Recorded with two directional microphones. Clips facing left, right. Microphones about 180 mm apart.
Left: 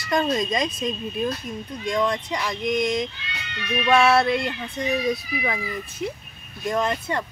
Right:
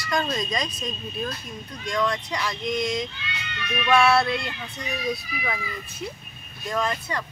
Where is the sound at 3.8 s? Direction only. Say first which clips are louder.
Left 2 dB; 20° left (ahead or behind).